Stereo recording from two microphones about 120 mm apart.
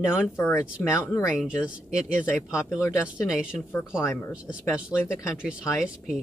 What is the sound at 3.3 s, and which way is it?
Speech, 5° right (ahead or behind).